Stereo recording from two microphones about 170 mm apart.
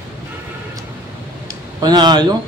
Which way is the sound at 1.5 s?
25° right (ahead or behind).